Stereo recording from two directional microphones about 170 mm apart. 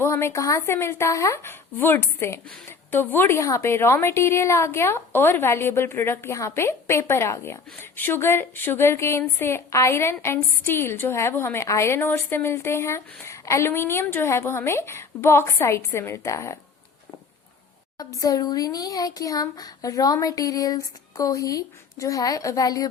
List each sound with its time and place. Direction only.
0.0 s a woman's voice: 15° left (ahead or behind)
17.9 s speech: 20° left (ahead or behind)